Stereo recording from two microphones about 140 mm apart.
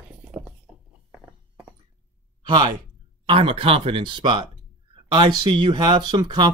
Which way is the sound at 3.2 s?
40° right (ahead or behind).